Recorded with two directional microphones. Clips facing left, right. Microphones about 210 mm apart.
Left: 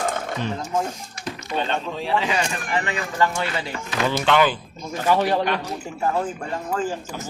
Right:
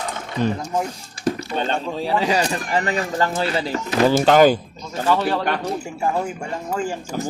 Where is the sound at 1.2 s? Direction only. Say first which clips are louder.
Right 5 dB; 35° right (ahead or behind).